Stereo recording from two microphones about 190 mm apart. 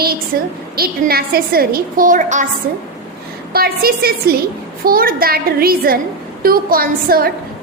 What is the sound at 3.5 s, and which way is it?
A woman's voice, 55° right (ahead or behind).